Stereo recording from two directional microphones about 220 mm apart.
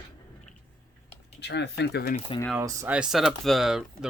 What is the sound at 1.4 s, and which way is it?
Speech, 50° left (ahead or behind).